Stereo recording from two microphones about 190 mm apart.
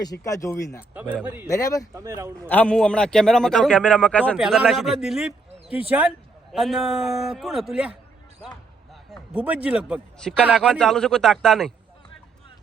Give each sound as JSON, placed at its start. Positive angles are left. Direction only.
{"t": 0.0, "sound": "speech", "side_deg": 20}
{"t": 1.9, "sound": "speech", "side_deg": -15}
{"t": 2.5, "sound": "a man's voice", "side_deg": 5}
{"t": 9.3, "sound": "speech", "side_deg": -5}
{"t": 10.7, "sound": "a man's voice", "side_deg": 5}